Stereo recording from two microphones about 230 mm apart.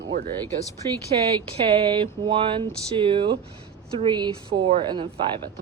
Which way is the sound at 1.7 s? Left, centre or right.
Right.